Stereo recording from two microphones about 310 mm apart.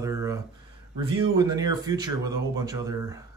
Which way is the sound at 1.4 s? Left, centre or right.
Centre.